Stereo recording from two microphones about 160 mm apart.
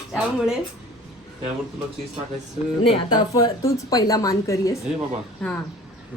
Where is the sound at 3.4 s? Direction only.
25° left (ahead or behind).